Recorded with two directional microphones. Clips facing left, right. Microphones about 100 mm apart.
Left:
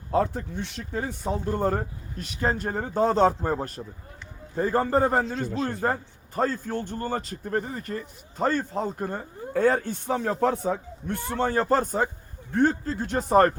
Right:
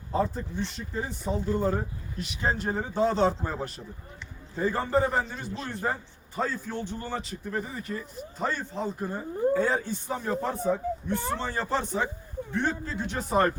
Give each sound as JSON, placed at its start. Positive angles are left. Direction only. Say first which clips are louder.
{"t": 0.1, "sound": "a man's voice", "louder": "left 3 dB", "side_deg": 65}
{"t": 5.2, "sound": "a man's voice", "louder": "left 8 dB", "side_deg": 90}
{"t": 5.6, "sound": "a man's voice", "louder": "left 1 dB", "side_deg": 50}